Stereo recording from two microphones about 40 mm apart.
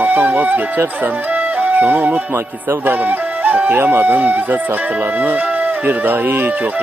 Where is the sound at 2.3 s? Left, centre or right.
Right.